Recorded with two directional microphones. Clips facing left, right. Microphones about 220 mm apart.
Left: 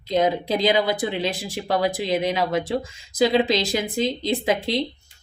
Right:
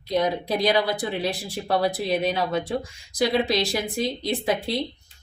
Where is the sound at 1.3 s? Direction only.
90° left.